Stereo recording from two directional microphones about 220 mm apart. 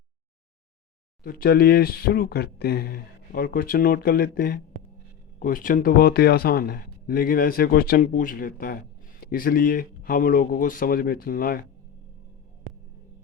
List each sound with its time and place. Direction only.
1.2 s speech: 45° left (ahead or behind)